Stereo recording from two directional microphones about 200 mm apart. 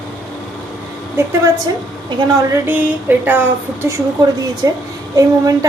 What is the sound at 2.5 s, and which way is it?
A woman's voice, 10° right (ahead or behind).